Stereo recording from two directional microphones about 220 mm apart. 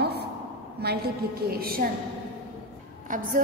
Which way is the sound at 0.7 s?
45° right (ahead or behind).